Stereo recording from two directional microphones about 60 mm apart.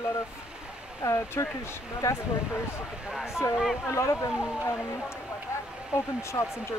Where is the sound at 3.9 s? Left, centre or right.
Left.